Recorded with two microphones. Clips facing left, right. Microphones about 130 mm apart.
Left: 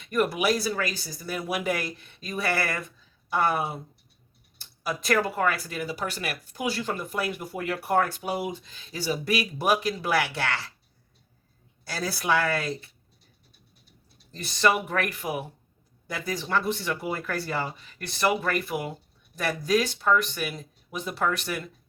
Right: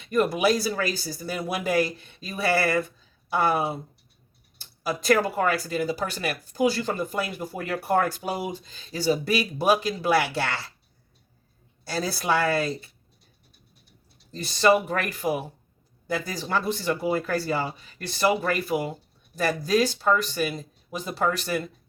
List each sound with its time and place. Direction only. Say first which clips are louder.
0.1 s speech: right 3 dB; 35° right (ahead or behind)
4.9 s speech: right 3 dB; 35° right (ahead or behind)
11.9 s speech: right 1 dB; 30° right (ahead or behind)
14.4 s speech: right 4 dB; 30° right (ahead or behind)